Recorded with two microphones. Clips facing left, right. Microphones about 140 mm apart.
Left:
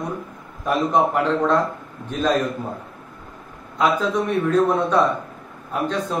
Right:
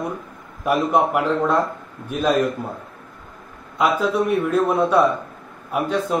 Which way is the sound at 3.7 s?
10° right (ahead or behind).